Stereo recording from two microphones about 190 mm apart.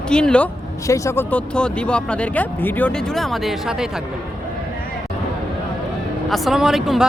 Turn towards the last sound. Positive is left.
turn(degrees=0)  # may be behind; listen again after turning